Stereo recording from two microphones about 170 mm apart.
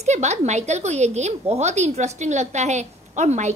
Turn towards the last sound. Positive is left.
turn(degrees=-45)  # may be behind; listen again after turning